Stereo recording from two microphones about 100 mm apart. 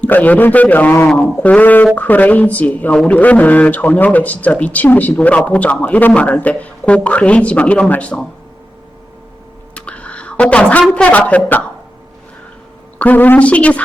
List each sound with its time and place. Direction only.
0.0 s a man's voice: 15° left (ahead or behind)
9.7 s a sound: 10° left (ahead or behind)
10.9 s a man's voice: 10° left (ahead or behind)
13.0 s a man's voice: 15° left (ahead or behind)